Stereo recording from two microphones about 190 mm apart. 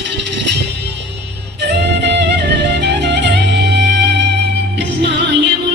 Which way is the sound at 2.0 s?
60° right (ahead or behind).